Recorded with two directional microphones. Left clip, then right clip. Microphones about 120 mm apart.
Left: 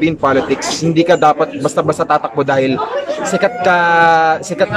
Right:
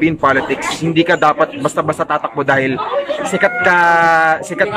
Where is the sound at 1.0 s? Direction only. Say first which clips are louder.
Left 1 dB; 40° left (ahead or behind).